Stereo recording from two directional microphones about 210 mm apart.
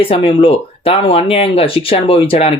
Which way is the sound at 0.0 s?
25° left (ahead or behind).